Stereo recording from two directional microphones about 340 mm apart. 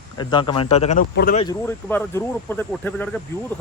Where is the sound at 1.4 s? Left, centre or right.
Centre.